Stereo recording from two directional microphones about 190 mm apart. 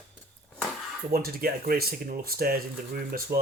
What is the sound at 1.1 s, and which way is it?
Speech, 50° right (ahead or behind).